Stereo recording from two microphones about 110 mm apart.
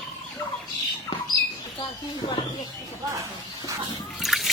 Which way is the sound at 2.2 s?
50° left (ahead or behind).